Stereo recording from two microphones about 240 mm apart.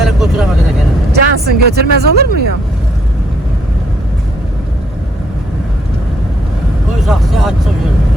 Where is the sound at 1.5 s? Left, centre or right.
Right.